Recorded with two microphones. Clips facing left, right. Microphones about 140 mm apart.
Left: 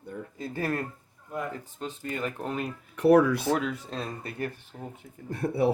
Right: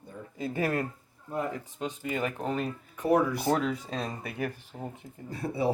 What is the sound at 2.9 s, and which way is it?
Speech, 90° left.